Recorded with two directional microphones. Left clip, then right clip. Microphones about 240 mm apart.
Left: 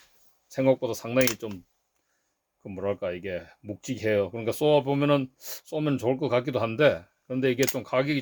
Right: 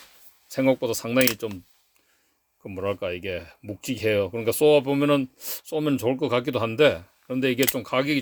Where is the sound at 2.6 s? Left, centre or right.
Right.